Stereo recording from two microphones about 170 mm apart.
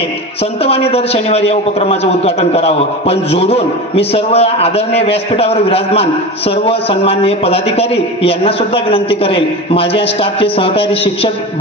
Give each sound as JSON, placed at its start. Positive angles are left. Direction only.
{"t": 0.7, "sound": "a man's voice", "side_deg": 35}